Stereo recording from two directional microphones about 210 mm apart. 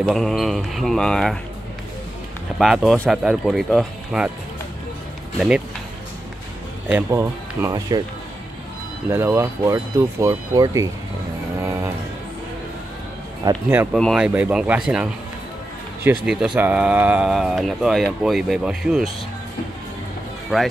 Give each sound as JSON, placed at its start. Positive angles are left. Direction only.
{"t": 0.0, "sound": "speech", "side_deg": 0}
{"t": 2.6, "sound": "speech", "side_deg": 0}
{"t": 6.9, "sound": "speech", "side_deg": -10}
{"t": 9.1, "sound": "speech", "side_deg": -10}
{"t": 11.6, "sound": "music", "side_deg": -15}
{"t": 13.4, "sound": "speech", "side_deg": -15}
{"t": 13.9, "sound": "speech", "side_deg": 0}
{"t": 16.3, "sound": "speech", "side_deg": -5}
{"t": 20.5, "sound": "speech", "side_deg": -5}